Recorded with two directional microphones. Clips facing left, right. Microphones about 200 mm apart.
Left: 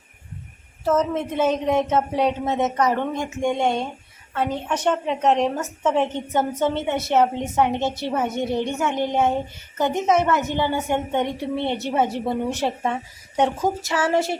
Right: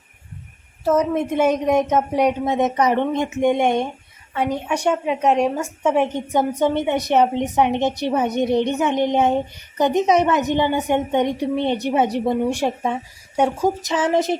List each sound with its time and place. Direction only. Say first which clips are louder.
0.9 s a woman's voice: right 3 dB; 15° right (ahead or behind)